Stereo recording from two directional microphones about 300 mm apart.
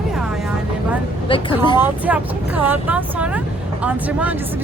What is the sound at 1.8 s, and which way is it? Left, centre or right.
Speech, centre.